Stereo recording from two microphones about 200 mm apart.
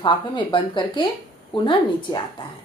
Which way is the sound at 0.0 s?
25° left (ahead or behind).